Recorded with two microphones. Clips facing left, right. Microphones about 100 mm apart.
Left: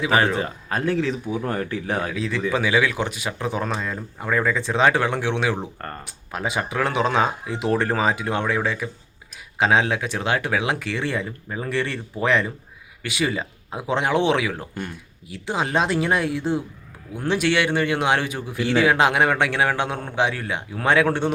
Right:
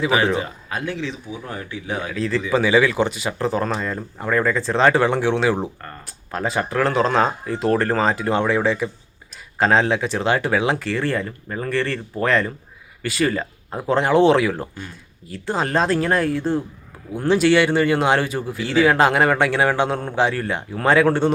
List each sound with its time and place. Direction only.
0.7 s speech: 40° left (ahead or behind)
2.1 s speech: 5° left (ahead or behind)
6.3 s speech: 5° left (ahead or behind)